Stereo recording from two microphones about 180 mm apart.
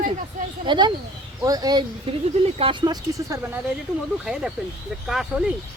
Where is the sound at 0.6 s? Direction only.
25° right (ahead or behind).